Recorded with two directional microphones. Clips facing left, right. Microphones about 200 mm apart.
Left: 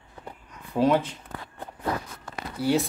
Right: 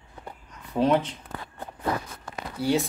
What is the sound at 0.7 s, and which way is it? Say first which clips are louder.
Speech: even; 5° left (ahead or behind).